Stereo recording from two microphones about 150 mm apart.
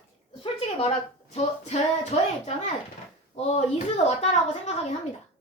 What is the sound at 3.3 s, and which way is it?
A woman's voice, 45° left (ahead or behind).